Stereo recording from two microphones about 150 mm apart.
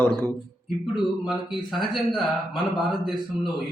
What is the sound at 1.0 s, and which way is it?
A man's voice, centre (ahead or behind).